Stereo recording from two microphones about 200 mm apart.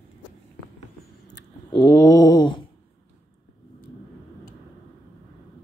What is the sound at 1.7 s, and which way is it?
Mantra, 15° left (ahead or behind).